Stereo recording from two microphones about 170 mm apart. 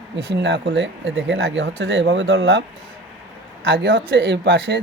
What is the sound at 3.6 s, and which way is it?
Speech, 90° right.